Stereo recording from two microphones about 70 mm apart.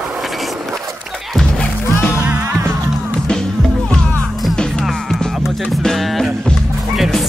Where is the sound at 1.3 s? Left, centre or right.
Centre.